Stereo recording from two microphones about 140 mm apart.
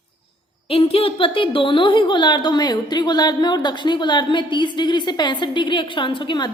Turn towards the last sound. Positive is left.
turn(degrees=35)  # may be behind; listen again after turning